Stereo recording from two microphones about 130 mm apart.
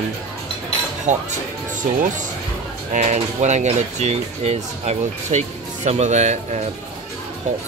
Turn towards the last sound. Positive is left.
turn(degrees=-60)  # may be behind; listen again after turning